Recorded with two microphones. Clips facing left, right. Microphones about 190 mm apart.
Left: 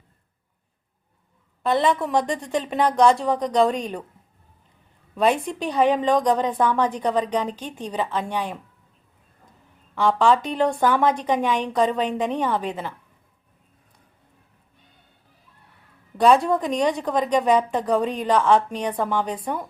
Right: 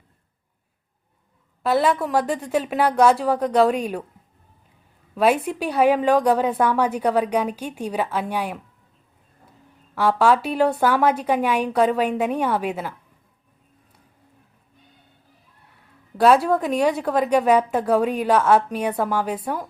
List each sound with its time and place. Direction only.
1.6 s a woman's voice: 5° right (ahead or behind)
5.1 s a woman's voice: 5° right (ahead or behind)
9.9 s a woman's voice: 5° right (ahead or behind)
16.1 s a woman's voice: 5° right (ahead or behind)